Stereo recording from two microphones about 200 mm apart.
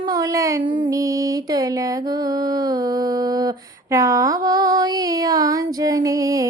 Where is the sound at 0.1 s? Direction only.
15° right (ahead or behind).